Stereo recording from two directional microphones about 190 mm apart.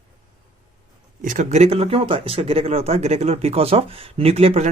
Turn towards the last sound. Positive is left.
turn(degrees=-35)  # may be behind; listen again after turning